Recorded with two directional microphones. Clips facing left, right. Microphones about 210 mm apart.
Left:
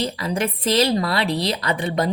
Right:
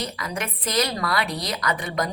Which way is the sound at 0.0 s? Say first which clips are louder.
Left 7 dB; 30° left (ahead or behind).